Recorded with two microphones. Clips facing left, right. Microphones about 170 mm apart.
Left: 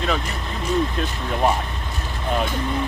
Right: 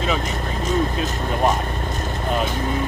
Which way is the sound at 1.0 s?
45° right (ahead or behind).